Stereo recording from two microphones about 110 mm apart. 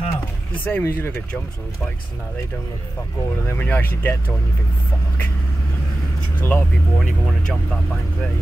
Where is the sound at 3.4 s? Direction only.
15° left (ahead or behind).